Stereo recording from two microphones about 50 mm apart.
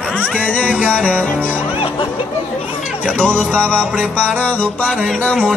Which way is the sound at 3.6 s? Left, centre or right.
Right.